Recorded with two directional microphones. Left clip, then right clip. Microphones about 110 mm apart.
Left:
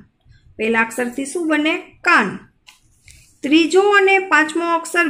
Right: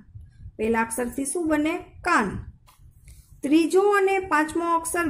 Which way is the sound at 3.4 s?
30° right (ahead or behind).